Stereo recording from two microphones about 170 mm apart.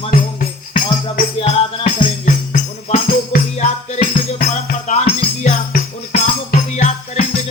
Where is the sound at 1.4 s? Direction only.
35° left (ahead or behind).